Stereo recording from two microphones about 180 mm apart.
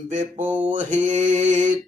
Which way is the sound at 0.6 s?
45° right (ahead or behind).